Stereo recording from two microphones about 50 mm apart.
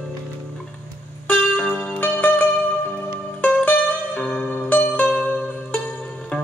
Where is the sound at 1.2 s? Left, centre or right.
Left.